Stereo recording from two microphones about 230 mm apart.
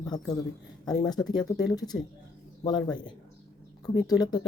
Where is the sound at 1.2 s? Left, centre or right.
Centre.